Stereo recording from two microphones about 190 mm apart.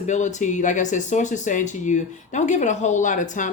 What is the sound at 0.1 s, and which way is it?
Speech, 40° left (ahead or behind).